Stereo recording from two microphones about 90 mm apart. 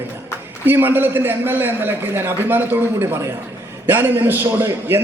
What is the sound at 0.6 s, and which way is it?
A man's voice, 25° right (ahead or behind).